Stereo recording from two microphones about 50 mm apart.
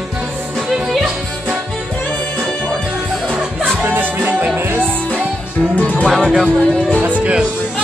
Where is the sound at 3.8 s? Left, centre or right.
Right.